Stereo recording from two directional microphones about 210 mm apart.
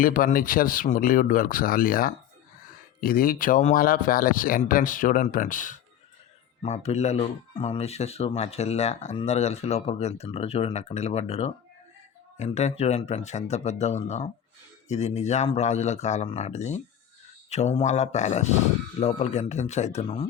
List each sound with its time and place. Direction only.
0.0 s speech: 40° left (ahead or behind)